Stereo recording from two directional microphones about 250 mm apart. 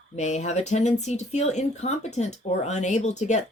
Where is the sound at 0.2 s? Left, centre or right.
Left.